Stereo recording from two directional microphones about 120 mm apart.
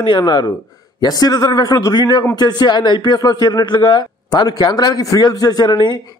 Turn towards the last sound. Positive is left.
turn(degrees=40)  # may be behind; listen again after turning